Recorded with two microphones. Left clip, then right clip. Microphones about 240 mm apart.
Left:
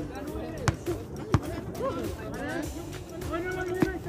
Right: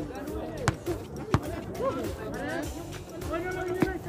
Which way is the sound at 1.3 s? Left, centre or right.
Right.